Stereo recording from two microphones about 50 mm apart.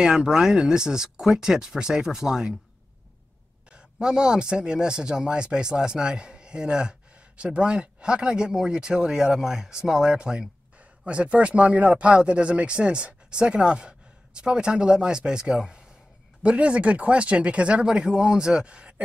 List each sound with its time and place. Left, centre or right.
0.0 s speech: centre
3.7 s speech: centre